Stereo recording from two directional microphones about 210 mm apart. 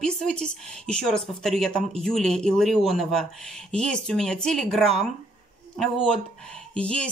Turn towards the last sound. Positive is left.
turn(degrees=5)  # may be behind; listen again after turning